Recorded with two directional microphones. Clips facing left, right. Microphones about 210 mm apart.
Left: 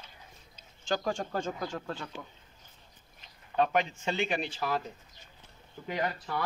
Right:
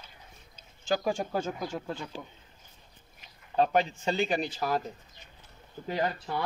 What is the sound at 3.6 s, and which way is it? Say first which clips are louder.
Speech: right 2 dB; 35° right (ahead or behind).